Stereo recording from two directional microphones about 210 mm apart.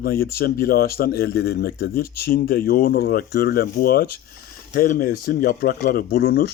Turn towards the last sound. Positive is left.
turn(degrees=50)  # may be behind; listen again after turning